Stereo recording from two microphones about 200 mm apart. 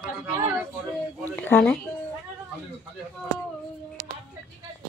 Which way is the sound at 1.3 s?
10° left (ahead or behind).